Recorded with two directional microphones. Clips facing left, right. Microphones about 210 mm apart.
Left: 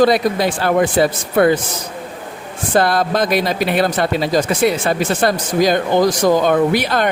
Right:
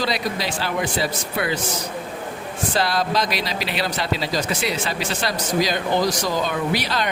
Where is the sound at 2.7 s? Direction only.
50° left (ahead or behind).